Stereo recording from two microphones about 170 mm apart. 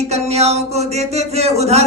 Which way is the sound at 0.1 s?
40° right (ahead or behind).